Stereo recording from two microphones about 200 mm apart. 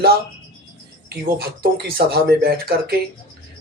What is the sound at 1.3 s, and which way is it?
Speech, 50° right (ahead or behind).